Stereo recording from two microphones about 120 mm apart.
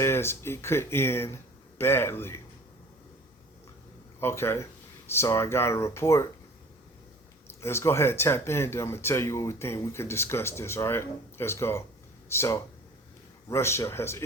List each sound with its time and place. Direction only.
0.0 s speech: 20° left (ahead or behind)
4.2 s speech: 20° left (ahead or behind)
7.4 s speech: 20° left (ahead or behind)